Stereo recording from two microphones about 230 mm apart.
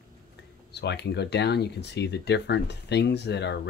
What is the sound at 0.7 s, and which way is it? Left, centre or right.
Speech, left.